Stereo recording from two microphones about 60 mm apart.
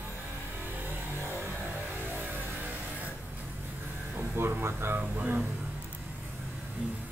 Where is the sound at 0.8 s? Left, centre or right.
Right.